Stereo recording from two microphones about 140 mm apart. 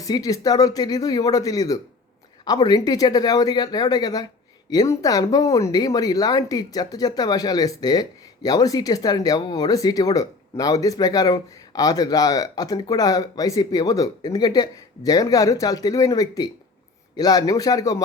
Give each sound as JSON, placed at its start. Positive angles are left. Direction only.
{"t": 0.0, "sound": "speech", "side_deg": 25}